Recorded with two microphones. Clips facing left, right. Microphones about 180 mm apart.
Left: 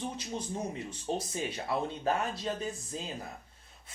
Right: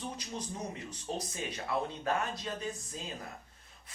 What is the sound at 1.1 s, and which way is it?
Speech, 35° left (ahead or behind).